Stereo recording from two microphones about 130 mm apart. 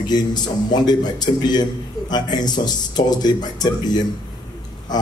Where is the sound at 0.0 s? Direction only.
30° left (ahead or behind).